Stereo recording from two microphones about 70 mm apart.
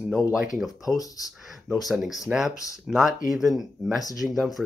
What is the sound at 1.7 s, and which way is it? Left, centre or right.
Speech, centre.